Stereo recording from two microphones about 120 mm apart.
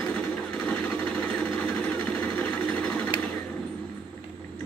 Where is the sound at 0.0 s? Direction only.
10° left (ahead or behind).